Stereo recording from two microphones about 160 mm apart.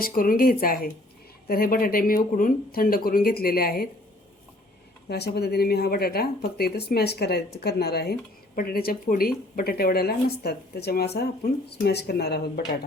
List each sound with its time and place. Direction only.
0.0 s speech: 60° left (ahead or behind)
5.0 s speech: 90° left
8.5 s speech: 65° left (ahead or behind); by 12.6 s 85° left